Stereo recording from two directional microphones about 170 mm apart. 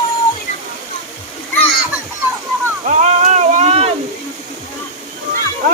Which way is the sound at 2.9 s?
45° right (ahead or behind).